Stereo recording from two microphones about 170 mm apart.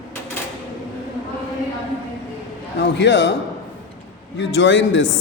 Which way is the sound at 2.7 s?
90° left.